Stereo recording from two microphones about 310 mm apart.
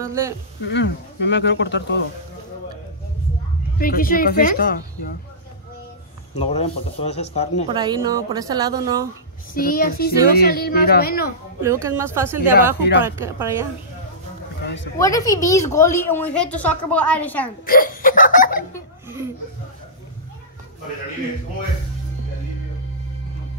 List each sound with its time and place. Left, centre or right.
0.0 s speech: centre
0.7 s speech: left
3.7 s a child's voice: left
6.3 s a child's voice: left
7.6 s a woman's voice: centre
9.5 s a child's voice: left
11.6 s a woman's voice: centre
15.0 s a woman's voice: centre
17.6 s speech: left